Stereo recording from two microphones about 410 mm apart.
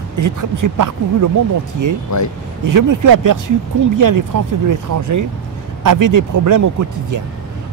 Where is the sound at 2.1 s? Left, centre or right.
Left.